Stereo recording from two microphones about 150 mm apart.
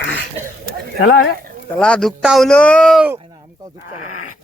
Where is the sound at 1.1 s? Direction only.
90° left.